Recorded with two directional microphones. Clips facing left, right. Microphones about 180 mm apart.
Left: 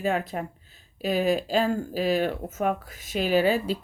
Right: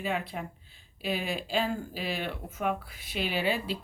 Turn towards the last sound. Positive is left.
turn(degrees=45)  # may be behind; listen again after turning